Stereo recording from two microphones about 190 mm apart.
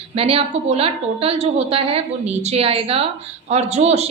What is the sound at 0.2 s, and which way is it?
A woman's voice, 30° right (ahead or behind).